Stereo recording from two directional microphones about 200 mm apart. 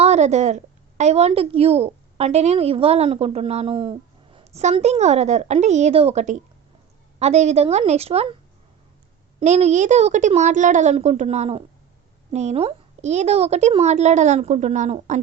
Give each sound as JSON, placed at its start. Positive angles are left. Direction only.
{"t": 0.0, "sound": "a woman's voice", "side_deg": -35}
{"t": 9.4, "sound": "a woman's voice", "side_deg": -35}